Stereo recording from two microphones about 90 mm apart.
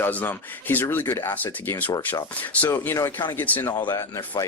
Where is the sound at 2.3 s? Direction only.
20° left (ahead or behind).